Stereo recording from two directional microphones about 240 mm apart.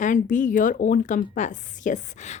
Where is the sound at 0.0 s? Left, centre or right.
Left.